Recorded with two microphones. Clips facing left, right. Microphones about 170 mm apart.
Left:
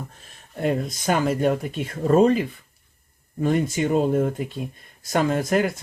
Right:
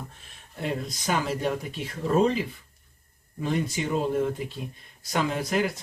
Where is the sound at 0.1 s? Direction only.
40° left (ahead or behind).